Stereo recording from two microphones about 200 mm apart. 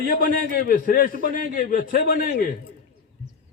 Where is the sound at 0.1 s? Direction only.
45° left (ahead or behind).